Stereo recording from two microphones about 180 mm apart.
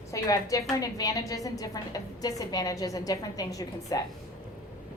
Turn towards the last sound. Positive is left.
turn(degrees=20)  # may be behind; listen again after turning